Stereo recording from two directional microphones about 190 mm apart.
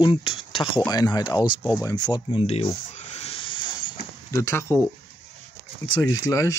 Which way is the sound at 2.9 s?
35° left (ahead or behind).